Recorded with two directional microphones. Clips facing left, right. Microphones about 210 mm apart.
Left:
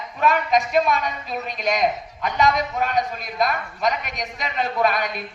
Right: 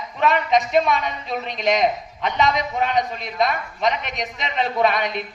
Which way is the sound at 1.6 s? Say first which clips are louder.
Right 2 dB; 25° right (ahead or behind).